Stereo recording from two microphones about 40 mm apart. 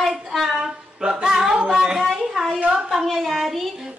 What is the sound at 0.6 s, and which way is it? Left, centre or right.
Singing, centre.